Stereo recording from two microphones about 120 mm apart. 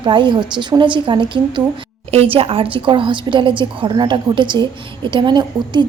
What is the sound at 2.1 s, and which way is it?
A woman's voice, 55° right (ahead or behind).